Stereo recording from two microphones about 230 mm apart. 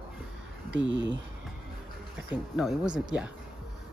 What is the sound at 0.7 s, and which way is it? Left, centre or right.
Speech, right.